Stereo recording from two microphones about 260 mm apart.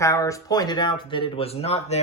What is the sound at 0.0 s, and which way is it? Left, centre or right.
Speech, centre.